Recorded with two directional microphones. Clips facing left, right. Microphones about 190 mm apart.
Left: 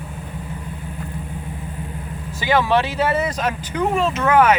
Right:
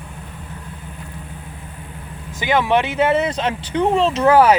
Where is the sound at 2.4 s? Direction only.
20° right (ahead or behind).